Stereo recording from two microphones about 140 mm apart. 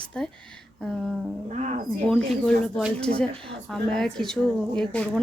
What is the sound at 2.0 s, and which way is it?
A woman's voice, 5° left (ahead or behind).